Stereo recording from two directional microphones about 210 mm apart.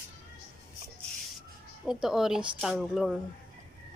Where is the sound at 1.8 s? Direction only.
Centre (ahead or behind).